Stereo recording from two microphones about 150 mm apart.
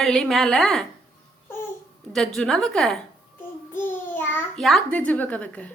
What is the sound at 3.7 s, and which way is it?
Child singing, 15° left (ahead or behind).